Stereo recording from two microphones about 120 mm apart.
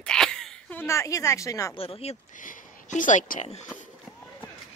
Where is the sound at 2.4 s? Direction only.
90° left.